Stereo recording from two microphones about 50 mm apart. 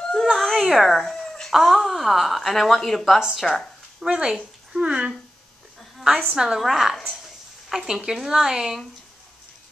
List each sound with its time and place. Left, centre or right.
0.2 s a sound: centre
1.5 s speech: centre
4.0 s speech: centre
6.3 s speech: centre
6.6 s speech: centre